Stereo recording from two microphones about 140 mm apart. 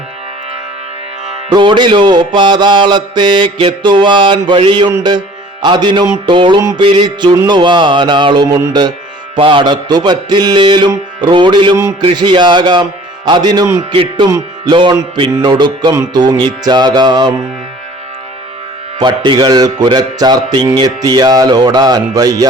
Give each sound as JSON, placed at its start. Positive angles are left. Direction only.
{"t": 1.5, "sound": "mantra", "side_deg": -35}
{"t": 8.4, "sound": "speech", "side_deg": -20}
{"t": 9.3, "sound": "mantra", "side_deg": -35}
{"t": 13.9, "sound": "mantra", "side_deg": -40}
{"t": 14.3, "sound": "music", "side_deg": -25}
{"t": 14.7, "sound": "mantra", "side_deg": -35}
{"t": 16.0, "sound": "speech", "side_deg": -25}
{"t": 18.9, "sound": "speech", "side_deg": -30}